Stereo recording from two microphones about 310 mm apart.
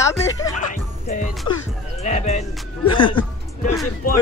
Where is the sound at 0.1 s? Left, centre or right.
Centre.